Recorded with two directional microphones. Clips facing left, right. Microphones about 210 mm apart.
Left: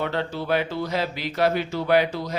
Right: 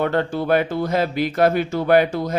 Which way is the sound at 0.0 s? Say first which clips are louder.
Right 6 dB; 50° right (ahead or behind).